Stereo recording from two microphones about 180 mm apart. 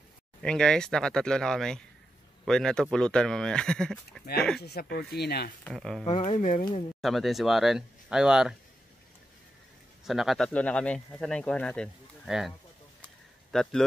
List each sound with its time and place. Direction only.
0.4 s speech: 5° left (ahead or behind)
4.6 s speech: 65° left (ahead or behind)
5.6 s speech: 5° left (ahead or behind)
6.0 s speech: 35° left (ahead or behind)
7.0 s speech: centre (ahead or behind)
10.0 s speech: centre (ahead or behind)